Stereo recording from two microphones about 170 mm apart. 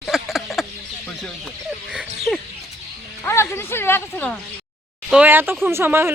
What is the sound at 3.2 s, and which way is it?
Speech, 15° left (ahead or behind).